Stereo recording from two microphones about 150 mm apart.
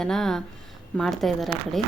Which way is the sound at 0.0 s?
Centre (ahead or behind).